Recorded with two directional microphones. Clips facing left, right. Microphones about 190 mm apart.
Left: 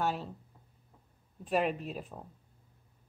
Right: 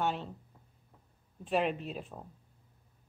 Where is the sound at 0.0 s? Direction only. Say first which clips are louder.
Even; 5° left (ahead or behind).